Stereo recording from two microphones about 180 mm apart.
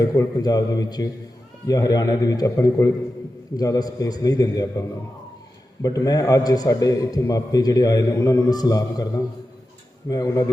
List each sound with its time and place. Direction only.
0.0 s a man's voice: 20° left (ahead or behind)